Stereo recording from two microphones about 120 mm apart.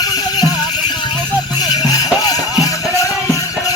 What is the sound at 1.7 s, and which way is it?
Music, 30° left (ahead or behind).